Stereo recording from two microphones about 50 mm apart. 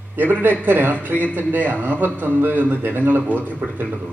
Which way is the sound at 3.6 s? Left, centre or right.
Right.